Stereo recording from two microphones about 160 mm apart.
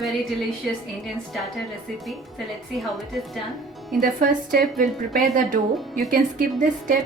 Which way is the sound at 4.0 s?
55° right (ahead or behind).